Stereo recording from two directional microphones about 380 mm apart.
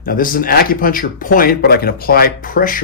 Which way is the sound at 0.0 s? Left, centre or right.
Left.